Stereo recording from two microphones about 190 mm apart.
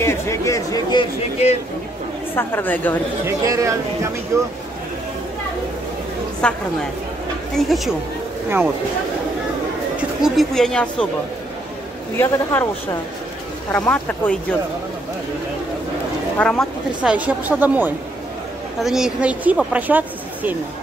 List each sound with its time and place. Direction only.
0.0 s speech: 15° left (ahead or behind)
2.3 s speech: 10° left (ahead or behind)
3.3 s speech: 15° right (ahead or behind)
6.4 s speech: 5° left (ahead or behind)
9.9 s speech: centre (ahead or behind)
12.2 s speech: 10° left (ahead or behind)
16.3 s speech: centre (ahead or behind)